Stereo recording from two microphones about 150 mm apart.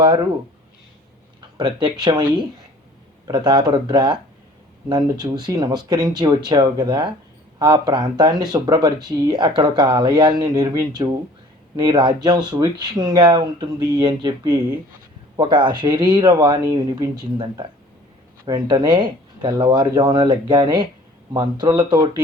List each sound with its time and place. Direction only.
0.0 s speech: 30° right (ahead or behind)
1.4 s speech: 30° right (ahead or behind)